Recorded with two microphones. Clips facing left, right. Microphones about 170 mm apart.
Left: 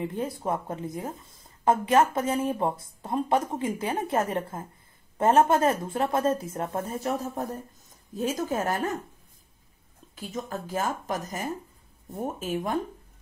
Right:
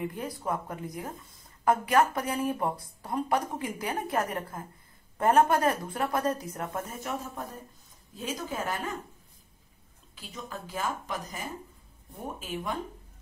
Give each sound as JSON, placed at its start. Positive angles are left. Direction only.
{"t": 0.0, "sound": "speech", "side_deg": 25}
{"t": 8.1, "sound": "speech", "side_deg": 45}
{"t": 10.1, "sound": "speech", "side_deg": 45}